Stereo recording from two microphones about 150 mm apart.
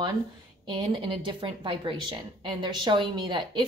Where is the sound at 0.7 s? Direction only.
30° right (ahead or behind).